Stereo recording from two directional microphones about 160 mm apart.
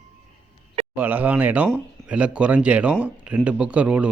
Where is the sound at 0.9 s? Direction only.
10° right (ahead or behind).